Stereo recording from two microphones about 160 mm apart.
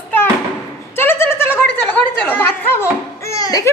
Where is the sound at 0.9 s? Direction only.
15° left (ahead or behind).